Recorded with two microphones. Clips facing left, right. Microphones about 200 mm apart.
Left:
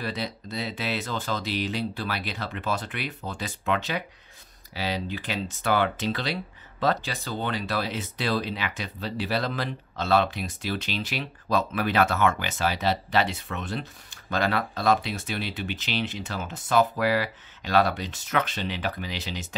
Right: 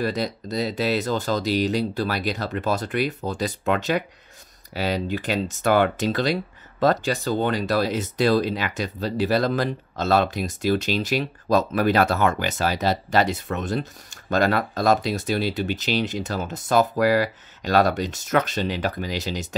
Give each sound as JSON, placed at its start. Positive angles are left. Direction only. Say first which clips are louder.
{"t": 0.0, "sound": "speech", "louder": "right 7 dB", "side_deg": -45}